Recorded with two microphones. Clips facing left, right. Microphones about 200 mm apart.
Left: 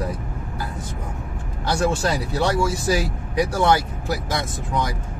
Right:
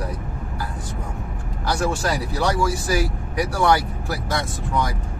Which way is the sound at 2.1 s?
25° left (ahead or behind).